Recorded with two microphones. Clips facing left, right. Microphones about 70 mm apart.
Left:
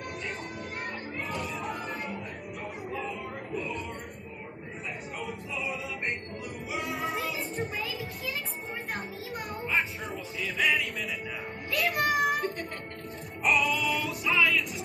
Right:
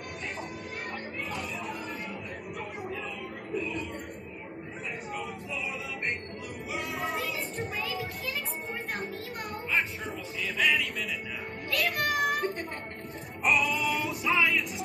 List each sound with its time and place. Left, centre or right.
3.5 s music: centre
5.2 s music: centre
7.2 s child singing: centre
10.4 s music: centre
11.7 s a sound: centre
13.4 s music: centre
14.0 s music: right